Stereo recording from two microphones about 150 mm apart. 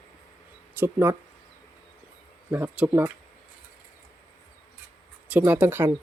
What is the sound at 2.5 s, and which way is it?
Speech, 15° right (ahead or behind).